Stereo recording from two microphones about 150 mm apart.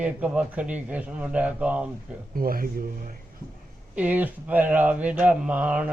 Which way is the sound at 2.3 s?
75° right (ahead or behind).